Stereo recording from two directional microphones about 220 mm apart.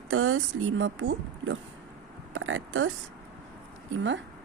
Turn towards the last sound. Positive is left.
turn(degrees=-55)  # may be behind; listen again after turning